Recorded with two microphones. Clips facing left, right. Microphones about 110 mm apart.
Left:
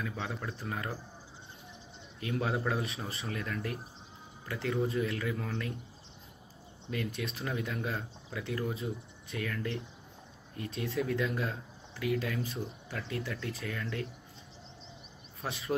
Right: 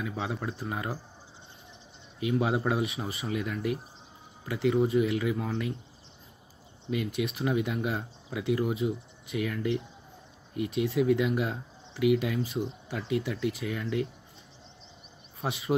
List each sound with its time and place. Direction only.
0.0 s speech: 10° right (ahead or behind)
2.1 s speech: 10° right (ahead or behind)
6.9 s speech: 15° right (ahead or behind)
15.4 s speech: 20° right (ahead or behind)